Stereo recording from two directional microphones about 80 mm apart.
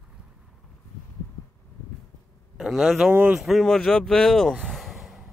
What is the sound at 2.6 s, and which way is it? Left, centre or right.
Speech, centre.